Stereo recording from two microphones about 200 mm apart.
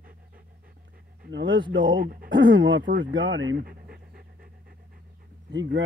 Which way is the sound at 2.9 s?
45° right (ahead or behind).